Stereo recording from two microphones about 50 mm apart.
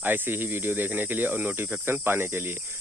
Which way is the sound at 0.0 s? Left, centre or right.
Right.